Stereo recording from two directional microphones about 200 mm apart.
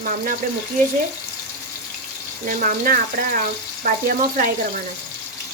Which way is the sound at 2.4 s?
40° right (ahead or behind).